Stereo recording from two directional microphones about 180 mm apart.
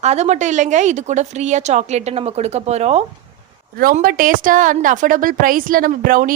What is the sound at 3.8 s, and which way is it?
A woman's voice, 50° right (ahead or behind).